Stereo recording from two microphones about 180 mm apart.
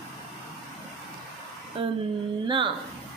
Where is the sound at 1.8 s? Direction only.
30° right (ahead or behind).